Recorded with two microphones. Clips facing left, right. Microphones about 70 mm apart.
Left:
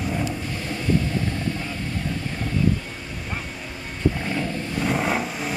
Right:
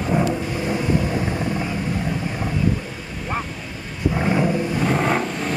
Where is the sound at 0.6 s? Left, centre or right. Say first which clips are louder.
Right 2 dB; centre.